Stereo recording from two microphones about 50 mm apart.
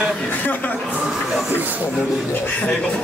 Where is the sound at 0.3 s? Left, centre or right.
Left.